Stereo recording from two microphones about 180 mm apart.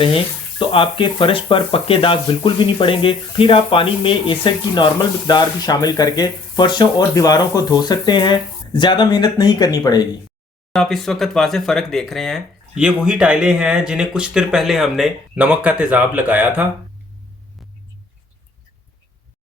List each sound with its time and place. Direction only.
0.7 s speech: 30° left (ahead or behind)
10.7 s speech: centre (ahead or behind)